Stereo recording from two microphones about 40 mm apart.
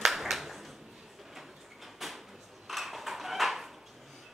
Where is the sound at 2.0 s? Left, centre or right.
Centre.